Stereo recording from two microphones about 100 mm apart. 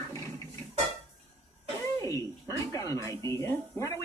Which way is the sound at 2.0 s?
30° left (ahead or behind).